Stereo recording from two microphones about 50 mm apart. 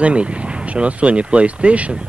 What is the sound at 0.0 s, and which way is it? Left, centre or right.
Speech, right.